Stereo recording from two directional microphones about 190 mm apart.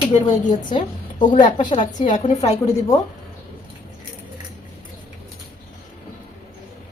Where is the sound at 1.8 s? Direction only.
40° left (ahead or behind).